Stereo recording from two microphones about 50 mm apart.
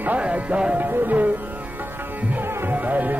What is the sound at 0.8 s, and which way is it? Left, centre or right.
Music, right.